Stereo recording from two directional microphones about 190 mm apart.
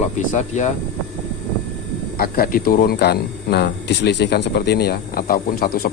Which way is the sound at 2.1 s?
50° left (ahead or behind).